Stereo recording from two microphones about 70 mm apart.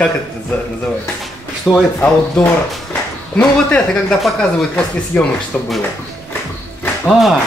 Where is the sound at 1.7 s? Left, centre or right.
Centre.